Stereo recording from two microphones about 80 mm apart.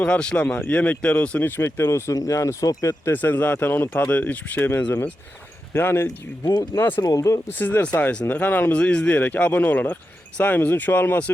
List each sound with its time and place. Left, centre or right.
0.0 s speech: centre
1.5 s speech: left
3.1 s speech: left
7.2 s speech: left
7.5 s speech: left